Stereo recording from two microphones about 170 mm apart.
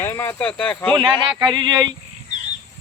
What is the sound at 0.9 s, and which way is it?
Speech, 30° right (ahead or behind).